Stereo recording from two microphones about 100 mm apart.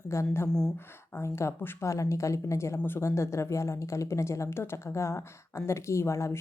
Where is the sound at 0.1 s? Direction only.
30° left (ahead or behind).